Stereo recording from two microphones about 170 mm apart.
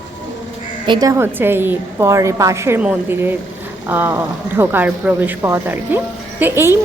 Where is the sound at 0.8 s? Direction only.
25° right (ahead or behind).